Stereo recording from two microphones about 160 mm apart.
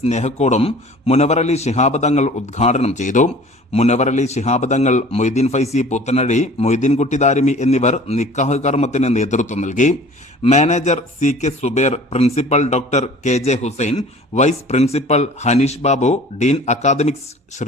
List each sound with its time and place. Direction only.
0.0 s a man's voice: 45° left (ahead or behind)